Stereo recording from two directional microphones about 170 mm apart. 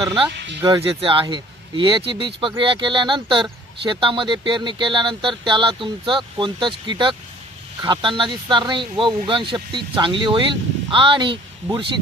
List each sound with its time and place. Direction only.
0.0 s speech: 30° right (ahead or behind)